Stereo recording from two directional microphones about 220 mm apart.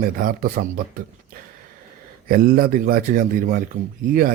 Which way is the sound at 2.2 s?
40° right (ahead or behind).